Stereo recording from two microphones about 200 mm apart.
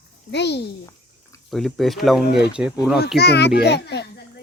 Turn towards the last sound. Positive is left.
turn(degrees=55)  # may be behind; listen again after turning